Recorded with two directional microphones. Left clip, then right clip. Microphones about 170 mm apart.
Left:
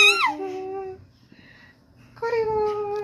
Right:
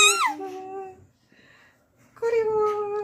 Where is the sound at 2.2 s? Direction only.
Centre (ahead or behind).